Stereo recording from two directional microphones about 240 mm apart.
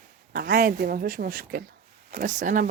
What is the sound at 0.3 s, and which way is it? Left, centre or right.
Speech, right.